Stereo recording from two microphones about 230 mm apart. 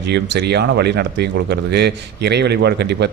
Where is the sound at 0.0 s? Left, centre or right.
Right.